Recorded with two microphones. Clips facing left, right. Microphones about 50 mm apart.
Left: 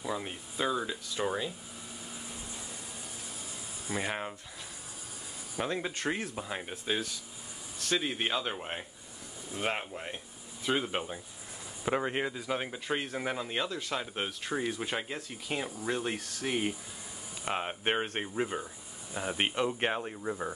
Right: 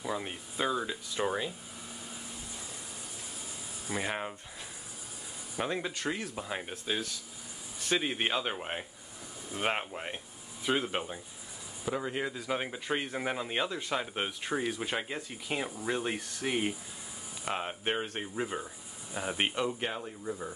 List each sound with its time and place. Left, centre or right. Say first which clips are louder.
0.0 s speech: even; centre
4.0 s speech: right 1 dB; centre
5.6 s speech: even; centre
6.0 s speech: left 3 dB; left
6.3 s speech: even; centre
7.8 s speech: right 1 dB; centre
9.5 s speech: right 1 dB; centre
11.8 s speech: left 3 dB; left
12.3 s speech: even; centre
17.5 s speech: left 2 dB; centre
19.8 s speech: left 4 dB; left